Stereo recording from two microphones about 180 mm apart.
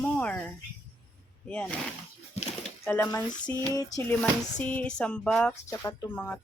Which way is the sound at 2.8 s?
10° left (ahead or behind).